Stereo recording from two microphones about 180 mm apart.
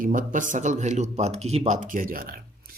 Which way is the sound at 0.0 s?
50° right (ahead or behind).